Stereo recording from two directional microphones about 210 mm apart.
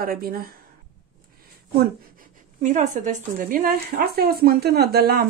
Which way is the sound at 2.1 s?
35° right (ahead or behind).